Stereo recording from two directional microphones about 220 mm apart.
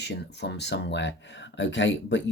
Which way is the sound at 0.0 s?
50° left (ahead or behind).